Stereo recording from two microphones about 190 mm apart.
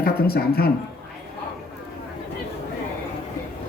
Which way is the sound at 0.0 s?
55° left (ahead or behind).